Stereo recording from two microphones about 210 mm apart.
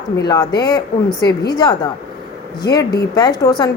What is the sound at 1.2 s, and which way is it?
Speech, 50° left (ahead or behind).